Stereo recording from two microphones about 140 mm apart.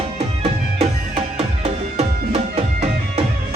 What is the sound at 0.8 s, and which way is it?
Music, 50° right (ahead or behind).